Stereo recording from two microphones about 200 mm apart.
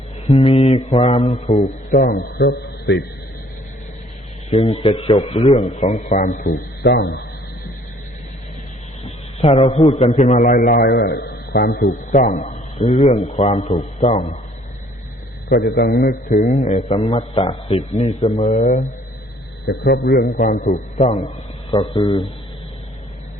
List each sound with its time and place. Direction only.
0.3 s a man's voice: 35° left (ahead or behind)
0.9 s mantra: 30° left (ahead or behind)
1.5 s a man's voice: 40° left (ahead or behind); by 3.0 s 60° left (ahead or behind)
4.9 s a man's voice: 30° left (ahead or behind); by 7.2 s 55° left (ahead or behind)
9.0 s a man's voice: 30° left (ahead or behind)
15.4 s a man's voice: 50° left (ahead or behind); by 18.9 s 35° left (ahead or behind)
19.6 s a man's voice: 60° left (ahead or behind); by 21.3 s 35° left (ahead or behind)
21.7 s mantra: 20° left (ahead or behind)